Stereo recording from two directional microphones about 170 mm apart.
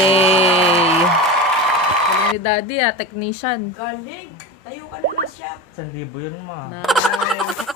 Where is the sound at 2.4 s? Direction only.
40° left (ahead or behind).